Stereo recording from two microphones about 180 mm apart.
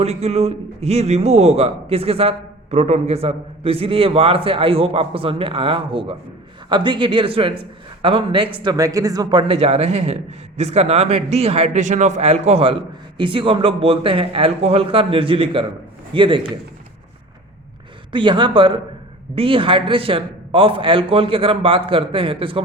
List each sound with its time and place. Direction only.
0.0 s a man's voice: 35° right (ahead or behind)
18.1 s a man's voice: 25° right (ahead or behind)